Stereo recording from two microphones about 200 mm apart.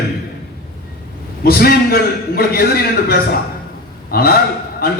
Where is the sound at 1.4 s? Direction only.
50° left (ahead or behind).